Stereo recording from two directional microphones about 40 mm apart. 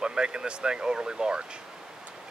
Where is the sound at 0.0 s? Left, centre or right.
Right.